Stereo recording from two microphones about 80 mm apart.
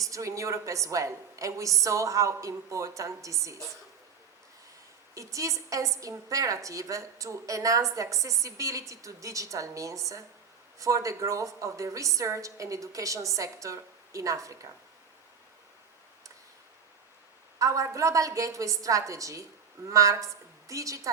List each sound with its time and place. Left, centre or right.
0.0 s a woman's voice: right
5.1 s a woman's voice: right
17.6 s a woman's voice: right